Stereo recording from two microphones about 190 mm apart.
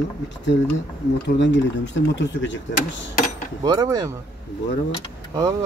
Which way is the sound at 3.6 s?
20° right (ahead or behind).